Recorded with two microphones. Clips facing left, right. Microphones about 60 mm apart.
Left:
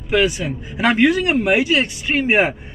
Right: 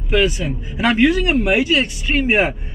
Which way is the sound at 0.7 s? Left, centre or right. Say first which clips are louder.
Even; left.